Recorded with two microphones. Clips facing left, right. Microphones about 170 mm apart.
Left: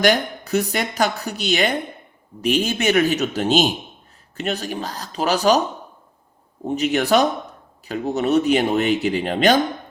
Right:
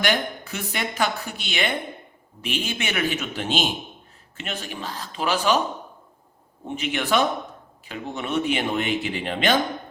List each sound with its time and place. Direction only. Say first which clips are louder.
0.0 s a woman's voice: left 6 dB; 40° left (ahead or behind)
6.7 s a woman's voice: left 7 dB; 40° left (ahead or behind)